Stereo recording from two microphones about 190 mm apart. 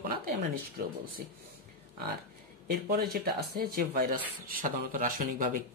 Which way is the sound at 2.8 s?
55° right (ahead or behind).